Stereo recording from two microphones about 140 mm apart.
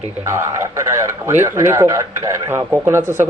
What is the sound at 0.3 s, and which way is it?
A man's voice, 20° right (ahead or behind).